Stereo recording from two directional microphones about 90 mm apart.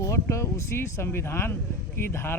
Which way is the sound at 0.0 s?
35° left (ahead or behind).